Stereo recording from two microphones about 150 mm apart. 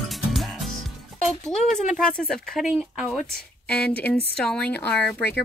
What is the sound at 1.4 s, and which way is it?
Speech, centre (ahead or behind).